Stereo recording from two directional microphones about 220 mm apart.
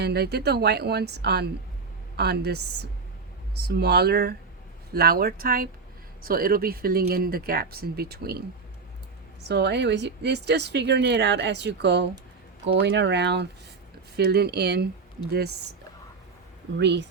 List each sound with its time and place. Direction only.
0.0 s speech: 45° right (ahead or behind)
9.5 s speech: 50° right (ahead or behind)
16.7 s speech: 50° right (ahead or behind)